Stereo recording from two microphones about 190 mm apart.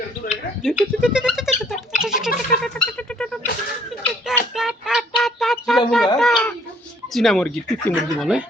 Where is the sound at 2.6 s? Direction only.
5° left (ahead or behind).